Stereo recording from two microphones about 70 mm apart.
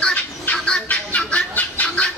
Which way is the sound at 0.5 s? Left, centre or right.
Centre.